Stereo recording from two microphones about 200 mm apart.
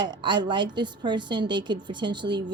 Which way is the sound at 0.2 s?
25° right (ahead or behind).